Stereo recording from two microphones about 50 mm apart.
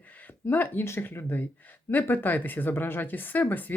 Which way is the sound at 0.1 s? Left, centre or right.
Left.